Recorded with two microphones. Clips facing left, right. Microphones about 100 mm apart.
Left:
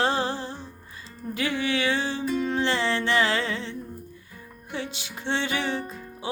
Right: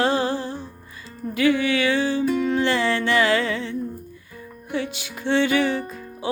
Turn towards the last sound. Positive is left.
turn(degrees=25)  # may be behind; listen again after turning